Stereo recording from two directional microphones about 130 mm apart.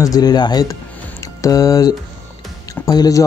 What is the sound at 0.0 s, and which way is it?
Speech, 30° left (ahead or behind).